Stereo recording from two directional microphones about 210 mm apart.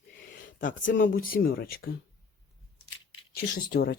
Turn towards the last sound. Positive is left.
turn(degrees=50)  # may be behind; listen again after turning